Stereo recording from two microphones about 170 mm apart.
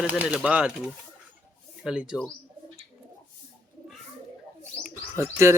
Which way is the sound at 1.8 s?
5° right (ahead or behind).